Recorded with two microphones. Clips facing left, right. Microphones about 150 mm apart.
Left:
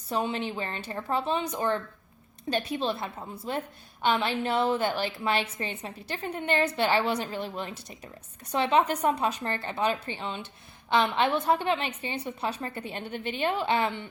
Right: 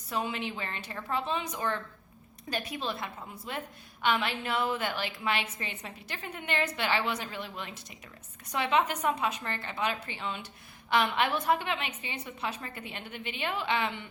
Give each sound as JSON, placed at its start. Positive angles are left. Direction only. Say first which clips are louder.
{"t": 0.1, "sound": "a woman's voice", "louder": "left 4 dB", "side_deg": 35}